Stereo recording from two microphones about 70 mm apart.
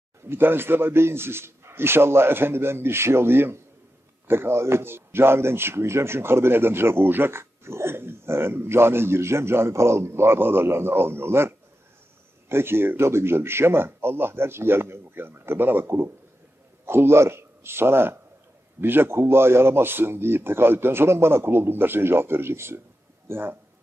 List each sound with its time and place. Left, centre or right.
0.3 s a man's voice: right